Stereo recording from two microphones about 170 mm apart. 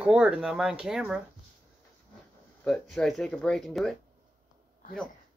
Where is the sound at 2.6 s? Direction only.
5° left (ahead or behind).